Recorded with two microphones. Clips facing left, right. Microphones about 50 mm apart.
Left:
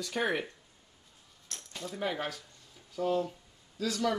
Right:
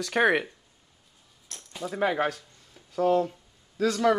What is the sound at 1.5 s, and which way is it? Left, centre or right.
Keys jangling, centre.